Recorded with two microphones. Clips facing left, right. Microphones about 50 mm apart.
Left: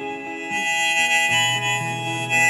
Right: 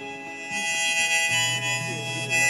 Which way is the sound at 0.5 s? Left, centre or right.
Left.